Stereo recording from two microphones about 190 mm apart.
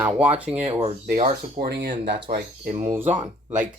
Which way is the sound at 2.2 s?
50° right (ahead or behind).